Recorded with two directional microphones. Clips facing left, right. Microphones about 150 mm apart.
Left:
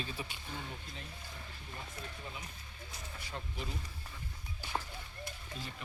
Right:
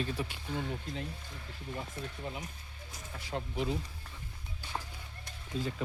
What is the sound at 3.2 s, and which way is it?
Speech, 90° right.